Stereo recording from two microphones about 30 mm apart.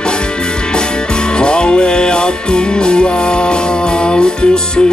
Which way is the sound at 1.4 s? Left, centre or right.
Left.